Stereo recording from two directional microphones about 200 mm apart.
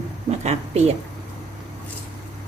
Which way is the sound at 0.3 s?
30° right (ahead or behind).